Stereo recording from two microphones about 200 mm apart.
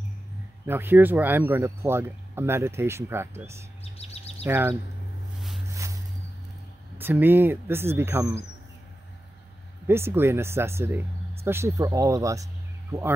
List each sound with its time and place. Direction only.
0.7 s speech: 10° right (ahead or behind)
3.8 s chirp: 30° left (ahead or behind)
4.5 s speech: 10° right (ahead or behind)
7.0 s speech: 10° right (ahead or behind)
9.8 s speech: 10° right (ahead or behind)